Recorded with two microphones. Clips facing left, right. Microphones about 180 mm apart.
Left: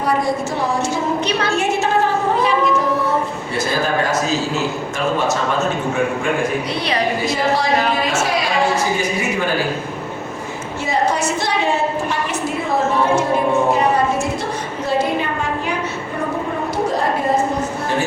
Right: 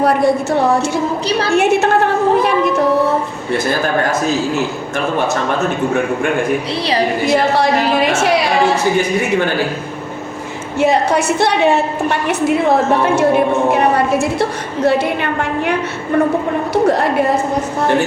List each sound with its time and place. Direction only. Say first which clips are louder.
0.0 s a woman's voice: right 6 dB; 65° right (ahead or behind)
1.5 s a woman's voice: right 7 dB; 65° right (ahead or behind)
7.3 s a woman's voice: right 6 dB; 65° right (ahead or behind)
10.8 s a woman's voice: right 6 dB; 65° right (ahead or behind)
14.8 s a woman's voice: right 4 dB; 70° right (ahead or behind)
16.7 s a woman's voice: right 7 dB; 70° right (ahead or behind)